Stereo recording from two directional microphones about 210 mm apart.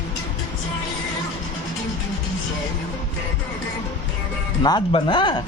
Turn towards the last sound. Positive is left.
turn(degrees=20)  # may be behind; listen again after turning